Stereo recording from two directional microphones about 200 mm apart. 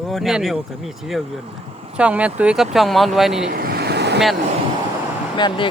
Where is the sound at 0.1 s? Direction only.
Centre (ahead or behind).